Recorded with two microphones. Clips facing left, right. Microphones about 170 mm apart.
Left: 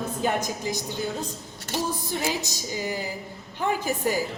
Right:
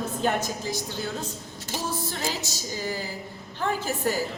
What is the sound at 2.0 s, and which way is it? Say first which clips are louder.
A woman's voice: left 3 dB; 15° left (ahead or behind).